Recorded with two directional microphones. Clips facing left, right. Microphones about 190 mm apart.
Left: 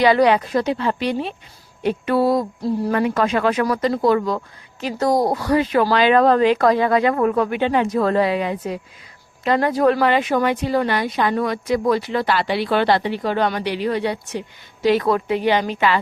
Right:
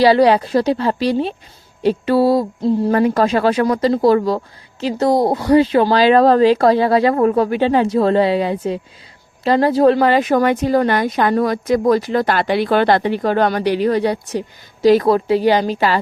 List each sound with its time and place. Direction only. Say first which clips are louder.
0.0 s speech: right 3 dB; 35° right (ahead or behind)
2.9 s speech: right 3 dB; 35° right (ahead or behind)